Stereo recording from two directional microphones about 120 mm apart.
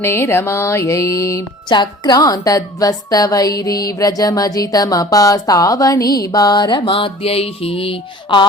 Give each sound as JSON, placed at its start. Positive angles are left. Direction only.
{"t": 0.0, "sound": "music", "side_deg": 20}
{"t": 1.7, "sound": "a woman's voice", "side_deg": 35}